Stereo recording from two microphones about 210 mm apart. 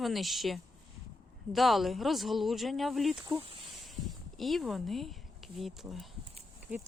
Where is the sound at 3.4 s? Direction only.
25° right (ahead or behind).